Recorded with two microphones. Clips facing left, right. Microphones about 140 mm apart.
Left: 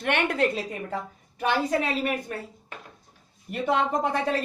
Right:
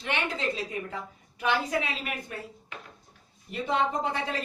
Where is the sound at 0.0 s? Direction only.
60° left (ahead or behind).